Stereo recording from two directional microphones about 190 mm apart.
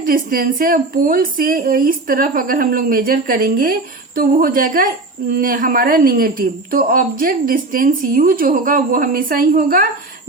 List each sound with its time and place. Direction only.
0.0 s speech: 50° right (ahead or behind)